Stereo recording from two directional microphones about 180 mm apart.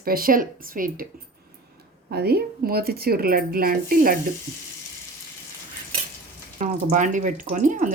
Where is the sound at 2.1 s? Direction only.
60° right (ahead or behind).